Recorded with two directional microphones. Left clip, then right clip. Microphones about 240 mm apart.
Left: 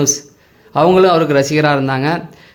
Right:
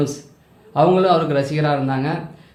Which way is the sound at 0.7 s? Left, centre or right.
Left.